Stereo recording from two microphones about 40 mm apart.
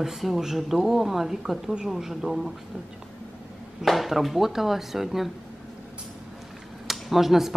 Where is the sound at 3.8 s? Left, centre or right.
Centre.